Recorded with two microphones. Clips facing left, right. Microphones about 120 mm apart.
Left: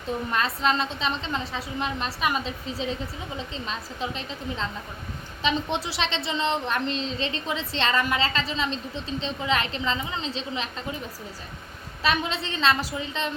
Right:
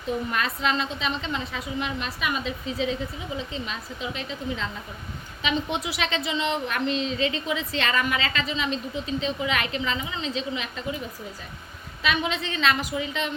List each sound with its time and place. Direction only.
0.3 s a woman's voice: 35° left (ahead or behind)
12.0 s a woman's voice: 35° left (ahead or behind)